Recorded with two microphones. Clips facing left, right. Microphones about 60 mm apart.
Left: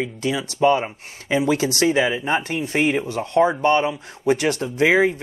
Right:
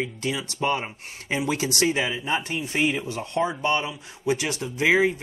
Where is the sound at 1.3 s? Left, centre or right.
Left.